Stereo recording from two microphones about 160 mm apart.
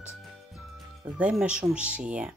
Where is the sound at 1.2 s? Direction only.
5° right (ahead or behind).